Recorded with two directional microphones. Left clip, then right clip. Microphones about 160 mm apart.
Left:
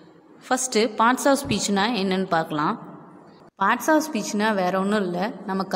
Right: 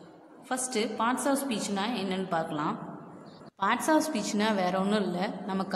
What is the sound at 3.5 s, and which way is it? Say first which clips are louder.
A woman's voice: left 6 dB; 25° left (ahead or behind).